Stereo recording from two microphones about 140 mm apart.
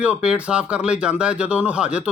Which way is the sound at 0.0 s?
10° right (ahead or behind).